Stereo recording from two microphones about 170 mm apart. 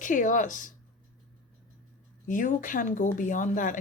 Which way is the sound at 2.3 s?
50° left (ahead or behind).